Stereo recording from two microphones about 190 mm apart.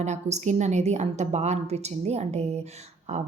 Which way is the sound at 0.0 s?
35° right (ahead or behind).